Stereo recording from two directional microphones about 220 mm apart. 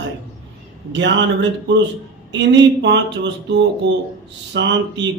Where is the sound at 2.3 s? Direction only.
55° right (ahead or behind).